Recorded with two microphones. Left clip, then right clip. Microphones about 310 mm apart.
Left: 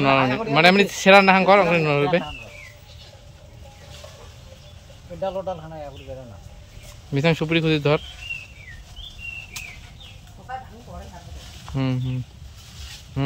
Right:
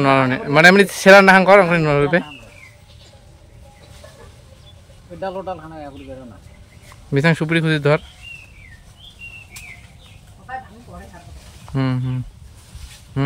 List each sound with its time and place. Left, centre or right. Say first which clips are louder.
0.0 s speech: right 3 dB; centre
5.2 s speech: right 1 dB; left
7.2 s speech: right 3 dB; centre
11.7 s speech: right 4 dB; centre